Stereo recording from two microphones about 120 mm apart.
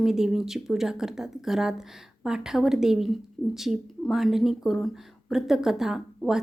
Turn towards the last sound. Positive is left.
turn(degrees=-5)  # may be behind; listen again after turning